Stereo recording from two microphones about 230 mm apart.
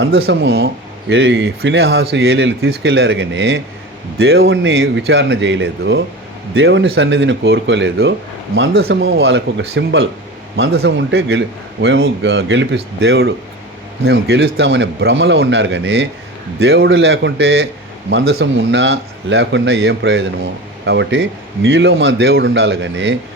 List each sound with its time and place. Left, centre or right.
0.0 s speech: right